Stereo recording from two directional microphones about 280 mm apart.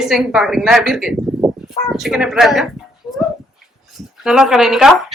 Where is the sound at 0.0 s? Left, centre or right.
Centre.